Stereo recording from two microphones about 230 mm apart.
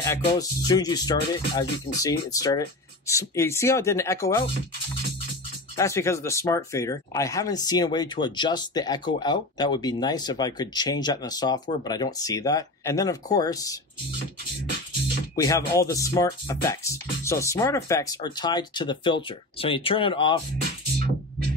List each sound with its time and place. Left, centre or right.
0.0 s speech: centre
5.8 s speech: centre
15.3 s speech: centre